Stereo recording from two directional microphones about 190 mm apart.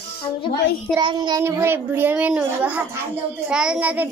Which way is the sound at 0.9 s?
20° right (ahead or behind).